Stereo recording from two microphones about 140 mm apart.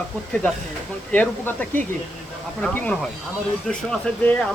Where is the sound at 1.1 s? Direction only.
10° left (ahead or behind).